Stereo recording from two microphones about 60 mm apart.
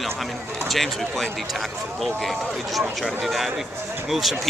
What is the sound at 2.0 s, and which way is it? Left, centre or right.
Speech, centre.